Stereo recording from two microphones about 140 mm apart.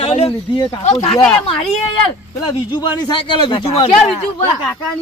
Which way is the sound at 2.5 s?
30° left (ahead or behind).